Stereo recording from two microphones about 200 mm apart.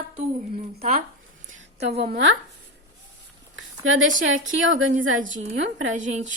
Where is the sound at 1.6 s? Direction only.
60° right (ahead or behind).